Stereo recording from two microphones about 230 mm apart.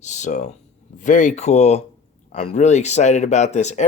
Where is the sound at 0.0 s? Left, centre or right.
Left.